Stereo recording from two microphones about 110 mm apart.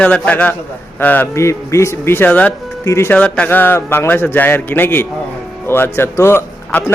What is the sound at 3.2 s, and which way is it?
A man's voice, 10° left (ahead or behind).